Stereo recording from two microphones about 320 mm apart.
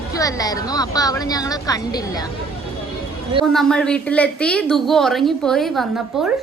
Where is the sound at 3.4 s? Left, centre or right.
Centre.